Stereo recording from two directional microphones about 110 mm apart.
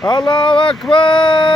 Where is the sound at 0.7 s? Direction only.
5° left (ahead or behind).